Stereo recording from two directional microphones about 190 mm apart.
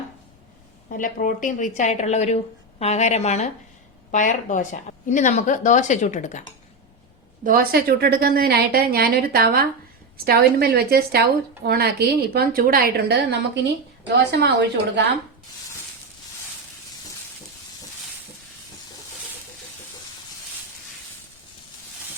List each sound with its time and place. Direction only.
0.9 s a woman's voice: 45° left (ahead or behind)
7.4 s a woman's voice: 50° right (ahead or behind)
14.3 s a woman's voice: 65° right (ahead or behind)